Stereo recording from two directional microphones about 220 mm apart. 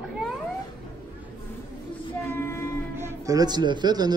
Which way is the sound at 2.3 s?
10° left (ahead or behind).